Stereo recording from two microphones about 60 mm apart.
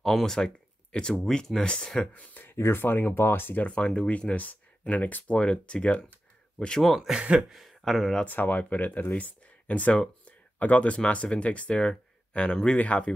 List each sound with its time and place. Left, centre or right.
0.0 s speech: centre
2.1 s speech: left
2.5 s speech: left
3.6 s speech: centre
7.0 s speech: centre
7.4 s speech: centre
8.3 s speech: left; by 12.7 s centre
12.7 s speech: left